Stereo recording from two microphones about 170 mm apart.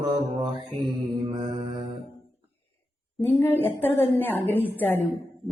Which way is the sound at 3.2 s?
10° left (ahead or behind).